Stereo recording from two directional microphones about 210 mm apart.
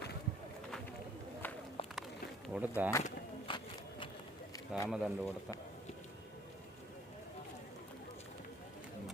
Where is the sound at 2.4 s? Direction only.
5° right (ahead or behind).